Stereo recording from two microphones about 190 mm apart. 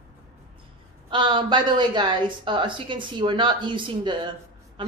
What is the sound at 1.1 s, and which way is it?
A woman's voice, 25° right (ahead or behind).